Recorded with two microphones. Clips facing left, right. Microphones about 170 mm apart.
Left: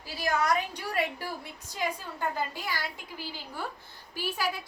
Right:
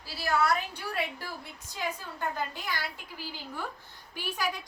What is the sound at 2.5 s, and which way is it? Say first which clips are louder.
Speech: left 1 dB; 10° left (ahead or behind).